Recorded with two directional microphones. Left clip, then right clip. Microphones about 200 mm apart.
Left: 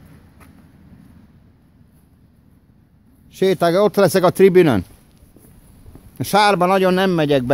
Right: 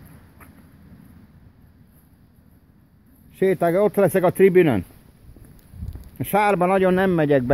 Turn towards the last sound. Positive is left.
turn(degrees=0)  # may be behind; listen again after turning